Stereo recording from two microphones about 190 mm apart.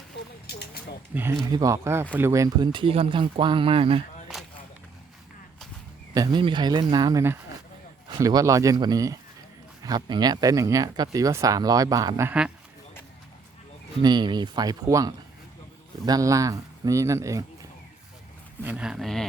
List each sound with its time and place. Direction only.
0.4 s a sound: 55° left (ahead or behind)
1.1 s speech: 10° right (ahead or behind); by 4.0 s 30° right (ahead or behind)
4.3 s a sound: centre (ahead or behind)
6.1 s speech: 25° right (ahead or behind)
14.0 s speech: 20° right (ahead or behind)
18.6 s speech: 5° right (ahead or behind)